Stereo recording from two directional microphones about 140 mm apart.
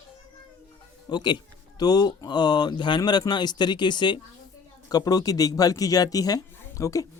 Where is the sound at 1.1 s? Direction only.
30° left (ahead or behind).